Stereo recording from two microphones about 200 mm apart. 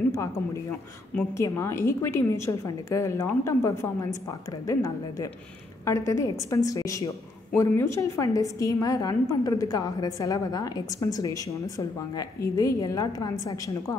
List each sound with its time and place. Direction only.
1.1 s a woman's voice: 10° left (ahead or behind)